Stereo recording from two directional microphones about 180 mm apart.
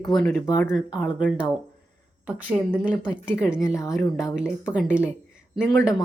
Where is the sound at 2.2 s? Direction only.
10° right (ahead or behind).